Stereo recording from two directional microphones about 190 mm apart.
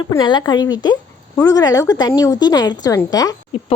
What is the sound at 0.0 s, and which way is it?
A woman's voice, 25° left (ahead or behind).